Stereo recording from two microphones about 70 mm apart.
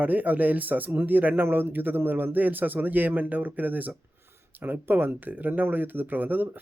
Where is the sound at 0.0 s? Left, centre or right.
Right.